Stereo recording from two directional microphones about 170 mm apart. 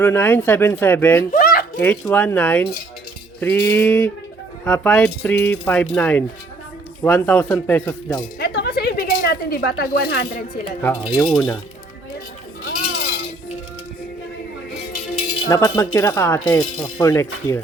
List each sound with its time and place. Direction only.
0.0 s mechanisms: 10° left (ahead or behind)
1.3 s a sound: 55° left (ahead or behind)
1.8 s mechanisms: 5° left (ahead or behind)
8.4 s a sound: 70° left (ahead or behind)
11.2 s mechanisms: 15° left (ahead or behind)
12.6 s chink: 65° left (ahead or behind)
15.4 s mechanisms: 20° left (ahead or behind)
16.4 s speech: 25° left (ahead or behind)
16.8 s mechanisms: 20° left (ahead or behind)